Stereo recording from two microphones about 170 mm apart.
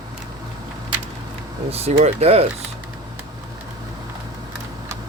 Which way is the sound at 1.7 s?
35° right (ahead or behind).